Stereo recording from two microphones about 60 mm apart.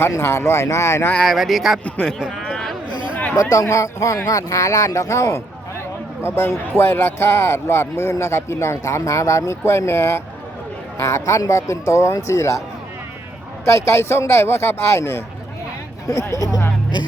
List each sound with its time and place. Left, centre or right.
0.2 s speech: left
1.2 s speech: centre
2.3 s a sound: centre
3.3 s a man's voice: left
4.3 s a man's voice: left
6.2 s speech: left
10.9 s a man's voice: left
13.7 s speech: left
16.0 s speech: left